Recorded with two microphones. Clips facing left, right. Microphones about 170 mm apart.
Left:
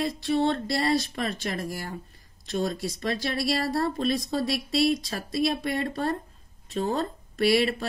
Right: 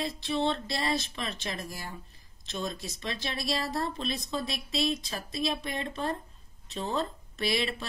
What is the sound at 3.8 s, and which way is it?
Speech, 45° left (ahead or behind).